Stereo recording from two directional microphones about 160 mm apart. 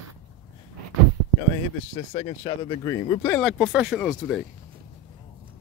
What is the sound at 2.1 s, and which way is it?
Speech, 40° left (ahead or behind).